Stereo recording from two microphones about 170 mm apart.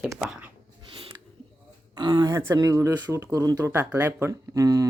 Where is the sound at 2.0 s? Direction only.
25° right (ahead or behind).